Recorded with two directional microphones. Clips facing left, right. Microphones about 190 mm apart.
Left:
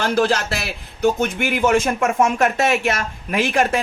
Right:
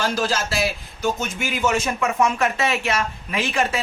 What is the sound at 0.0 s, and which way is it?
A man's voice, 60° left (ahead or behind).